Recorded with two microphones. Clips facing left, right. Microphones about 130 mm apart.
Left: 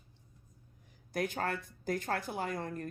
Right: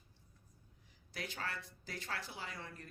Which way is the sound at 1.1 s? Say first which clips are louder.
Left 10 dB; 50° left (ahead or behind).